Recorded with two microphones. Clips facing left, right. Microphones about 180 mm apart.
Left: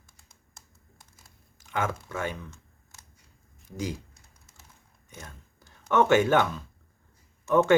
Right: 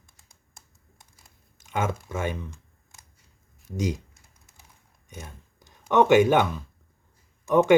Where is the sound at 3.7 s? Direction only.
20° right (ahead or behind).